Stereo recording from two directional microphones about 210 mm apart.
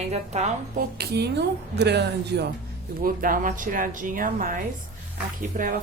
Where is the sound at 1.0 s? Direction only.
50° right (ahead or behind).